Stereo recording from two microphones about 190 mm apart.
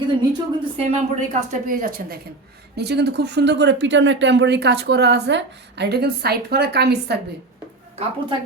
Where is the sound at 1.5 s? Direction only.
45° right (ahead or behind).